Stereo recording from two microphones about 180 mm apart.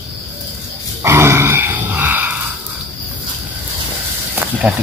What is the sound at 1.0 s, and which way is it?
Grunt, 15° right (ahead or behind).